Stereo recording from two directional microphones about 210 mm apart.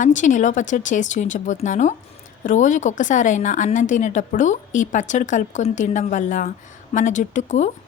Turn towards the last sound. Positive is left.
turn(degrees=35)  # may be behind; listen again after turning